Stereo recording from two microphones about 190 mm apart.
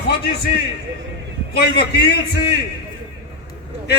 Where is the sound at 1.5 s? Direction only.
60° left (ahead or behind).